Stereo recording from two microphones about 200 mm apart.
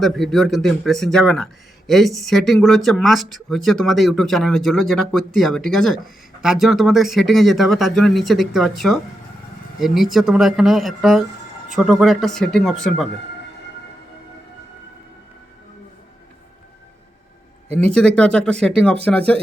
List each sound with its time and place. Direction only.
0.0 s speech: centre (ahead or behind)
17.9 s speech: 5° left (ahead or behind)